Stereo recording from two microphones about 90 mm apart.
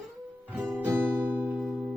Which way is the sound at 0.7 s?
20° right (ahead or behind).